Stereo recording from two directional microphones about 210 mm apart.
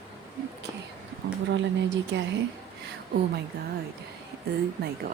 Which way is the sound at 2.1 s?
60° right (ahead or behind).